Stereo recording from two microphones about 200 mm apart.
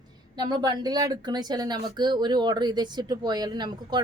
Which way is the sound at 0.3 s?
20° right (ahead or behind).